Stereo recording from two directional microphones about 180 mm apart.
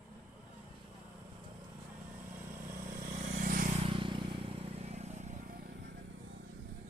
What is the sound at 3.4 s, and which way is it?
Vehicle, 50° right (ahead or behind).